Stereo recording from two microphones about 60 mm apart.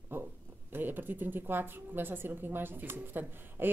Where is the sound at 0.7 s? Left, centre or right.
Right.